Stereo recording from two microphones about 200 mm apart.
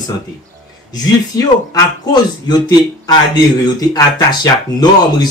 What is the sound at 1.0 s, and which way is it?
Speech, 20° left (ahead or behind).